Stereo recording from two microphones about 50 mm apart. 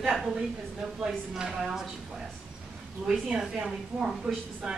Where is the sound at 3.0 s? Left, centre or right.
Centre.